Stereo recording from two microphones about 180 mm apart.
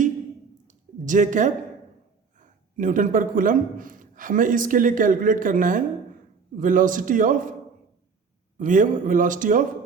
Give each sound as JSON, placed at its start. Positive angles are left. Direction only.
{"t": 0.7, "sound": "a sound", "side_deg": -45}
{"t": 2.4, "sound": "a man's voice", "side_deg": -45}
{"t": 8.5, "sound": "a man's voice", "side_deg": -45}